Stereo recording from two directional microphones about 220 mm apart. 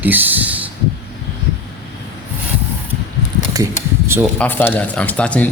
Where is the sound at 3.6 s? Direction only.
15° right (ahead or behind).